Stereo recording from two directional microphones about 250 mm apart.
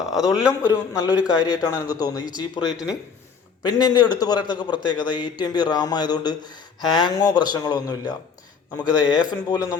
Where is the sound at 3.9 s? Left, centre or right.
Centre.